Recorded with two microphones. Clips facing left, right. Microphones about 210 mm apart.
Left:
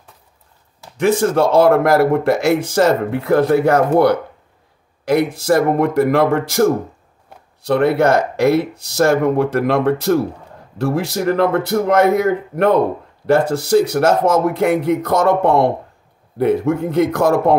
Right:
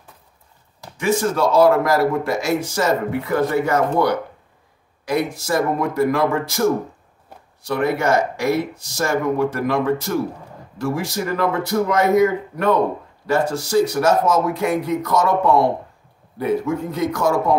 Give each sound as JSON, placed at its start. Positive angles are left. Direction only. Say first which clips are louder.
{"t": 0.9, "sound": "speech", "louder": "left 5 dB", "side_deg": 60}
{"t": 5.1, "sound": "speech", "louder": "left 6 dB", "side_deg": 65}